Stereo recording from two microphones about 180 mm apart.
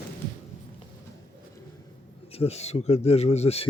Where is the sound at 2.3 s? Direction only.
35° left (ahead or behind).